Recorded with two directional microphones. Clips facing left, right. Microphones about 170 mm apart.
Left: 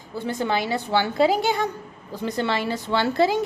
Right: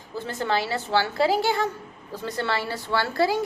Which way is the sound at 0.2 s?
15° left (ahead or behind).